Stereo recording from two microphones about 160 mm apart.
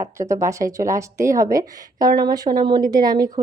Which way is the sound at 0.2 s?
20° right (ahead or behind).